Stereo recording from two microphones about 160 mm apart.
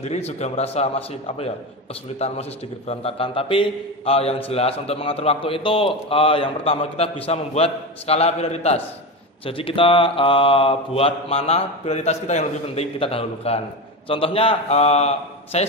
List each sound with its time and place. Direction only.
0.0 s a man's voice: 45° left (ahead or behind)